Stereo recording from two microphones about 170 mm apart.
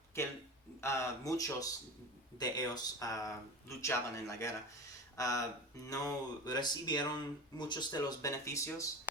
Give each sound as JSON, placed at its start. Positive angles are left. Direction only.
{"t": 0.2, "sound": "speech", "side_deg": 15}